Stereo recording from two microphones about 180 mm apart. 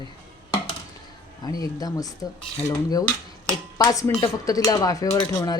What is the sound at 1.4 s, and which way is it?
Speech, 20° left (ahead or behind).